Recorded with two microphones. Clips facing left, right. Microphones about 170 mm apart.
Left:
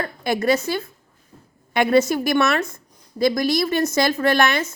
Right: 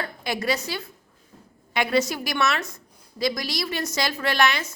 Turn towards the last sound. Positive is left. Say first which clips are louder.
# left 5 dB
turn(degrees=50)  # may be behind; listen again after turning